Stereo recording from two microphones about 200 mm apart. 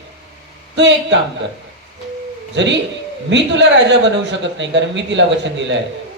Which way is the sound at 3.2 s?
65° right (ahead or behind).